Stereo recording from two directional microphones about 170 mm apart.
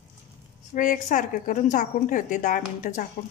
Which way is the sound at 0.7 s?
50° left (ahead or behind).